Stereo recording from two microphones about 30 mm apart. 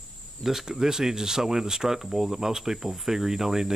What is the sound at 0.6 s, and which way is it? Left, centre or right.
Speech, centre.